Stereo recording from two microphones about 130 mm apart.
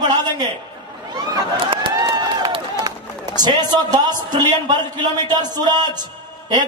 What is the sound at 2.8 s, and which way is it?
A man's voice, 30° right (ahead or behind).